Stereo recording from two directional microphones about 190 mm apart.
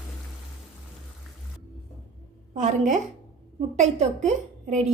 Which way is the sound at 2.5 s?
40° right (ahead or behind).